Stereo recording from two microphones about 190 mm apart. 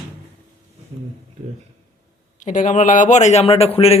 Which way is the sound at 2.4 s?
40° left (ahead or behind).